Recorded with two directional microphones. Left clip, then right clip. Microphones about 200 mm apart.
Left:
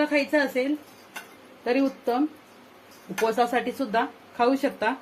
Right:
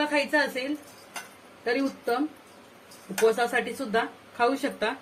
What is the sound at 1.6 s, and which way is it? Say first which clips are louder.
Speech: left 3 dB; 35° left (ahead or behind).